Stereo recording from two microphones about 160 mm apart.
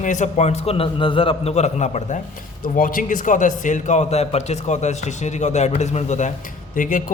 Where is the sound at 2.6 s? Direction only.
60° left (ahead or behind).